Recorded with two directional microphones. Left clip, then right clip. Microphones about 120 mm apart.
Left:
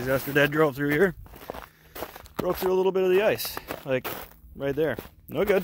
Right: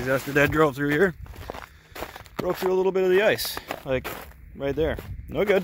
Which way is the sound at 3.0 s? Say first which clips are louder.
Right 2 dB; 20° right (ahead or behind).